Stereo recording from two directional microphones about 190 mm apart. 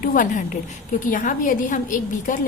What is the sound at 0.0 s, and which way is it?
A woman's voice, 45° left (ahead or behind).